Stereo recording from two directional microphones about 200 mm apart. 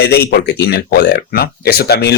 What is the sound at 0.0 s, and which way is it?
Speech, 55° left (ahead or behind).